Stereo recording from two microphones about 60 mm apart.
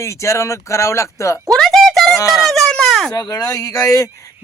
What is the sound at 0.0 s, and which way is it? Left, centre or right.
Speech, left.